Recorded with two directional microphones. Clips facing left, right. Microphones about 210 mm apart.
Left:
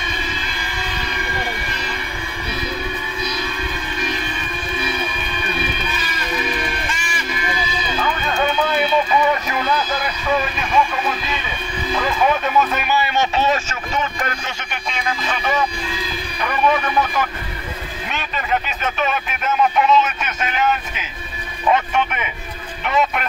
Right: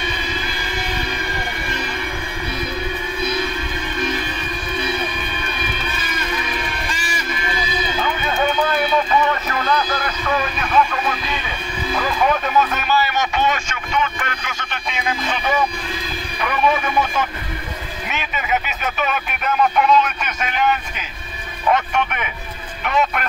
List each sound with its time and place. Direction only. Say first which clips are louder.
9.5 s speech: even; 10° left (ahead or behind)
12.5 s speech: even; 5° left (ahead or behind)
12.9 s a man's voice: even; 25° left (ahead or behind)
18.1 s speech: even; 5° right (ahead or behind)